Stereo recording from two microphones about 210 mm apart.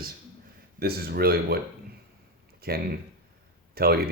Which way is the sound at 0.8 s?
45° right (ahead or behind).